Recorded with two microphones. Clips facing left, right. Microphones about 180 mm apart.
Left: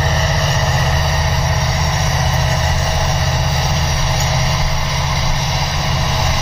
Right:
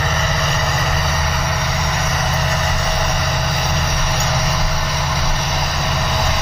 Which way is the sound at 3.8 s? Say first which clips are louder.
Left 1 dB; 25° left (ahead or behind).